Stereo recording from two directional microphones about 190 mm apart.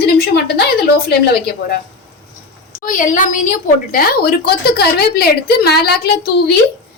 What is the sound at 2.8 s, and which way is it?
A woman's voice, 45° left (ahead or behind).